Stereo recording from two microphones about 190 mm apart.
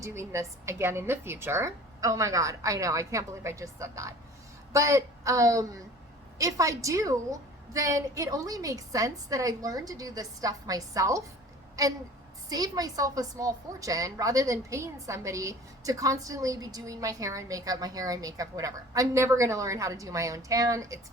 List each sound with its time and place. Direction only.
0.0 s a woman's voice: 15° right (ahead or behind)